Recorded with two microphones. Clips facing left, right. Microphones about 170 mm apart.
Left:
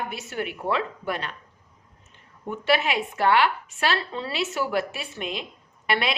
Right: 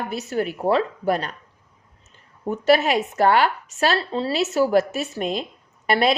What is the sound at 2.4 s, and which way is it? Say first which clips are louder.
A woman's voice: right 6 dB; 40° right (ahead or behind).